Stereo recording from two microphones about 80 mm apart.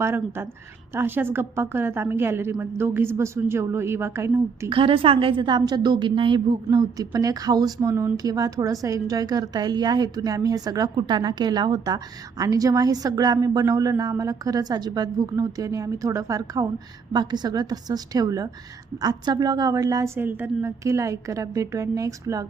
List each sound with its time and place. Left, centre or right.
0.0 s a woman's voice: right
4.7 s a woman's voice: right
6.7 s a woman's voice: right
10.9 s a woman's voice: right
12.4 s a woman's voice: right
13.9 s a woman's voice: right
16.6 s a woman's voice: right
20.1 s a woman's voice: right